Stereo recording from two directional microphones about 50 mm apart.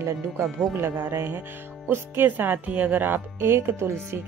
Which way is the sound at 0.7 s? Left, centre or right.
Right.